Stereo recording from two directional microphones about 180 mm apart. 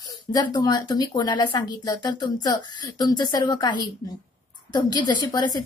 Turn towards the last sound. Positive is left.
turn(degrees=20)  # may be behind; listen again after turning